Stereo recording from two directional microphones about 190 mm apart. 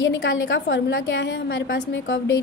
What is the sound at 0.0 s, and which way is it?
A woman's voice, 75° left (ahead or behind).